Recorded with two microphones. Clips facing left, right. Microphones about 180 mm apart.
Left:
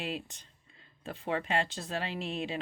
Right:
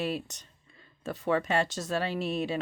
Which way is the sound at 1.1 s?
40° right (ahead or behind).